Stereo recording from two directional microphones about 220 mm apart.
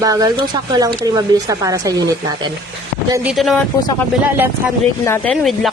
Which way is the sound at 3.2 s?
Centre (ahead or behind).